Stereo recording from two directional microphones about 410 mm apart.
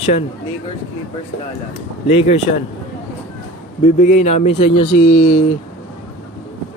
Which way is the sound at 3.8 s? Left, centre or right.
Centre.